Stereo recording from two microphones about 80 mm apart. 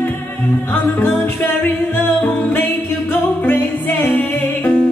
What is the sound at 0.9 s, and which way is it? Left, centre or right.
Music, left.